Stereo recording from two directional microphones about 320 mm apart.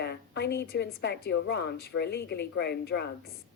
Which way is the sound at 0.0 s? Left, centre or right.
Left.